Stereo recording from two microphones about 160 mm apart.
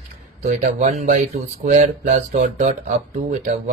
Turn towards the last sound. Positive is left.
turn(degrees=-45)  # may be behind; listen again after turning